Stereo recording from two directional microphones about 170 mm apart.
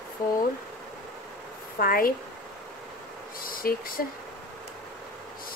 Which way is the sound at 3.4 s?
60° left (ahead or behind).